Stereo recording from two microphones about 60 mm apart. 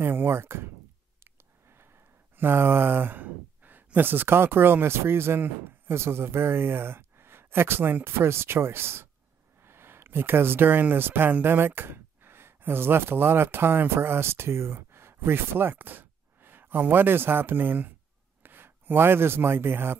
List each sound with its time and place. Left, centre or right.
0.0 s speech: right
1.2 s a sound: right
2.3 s speech: right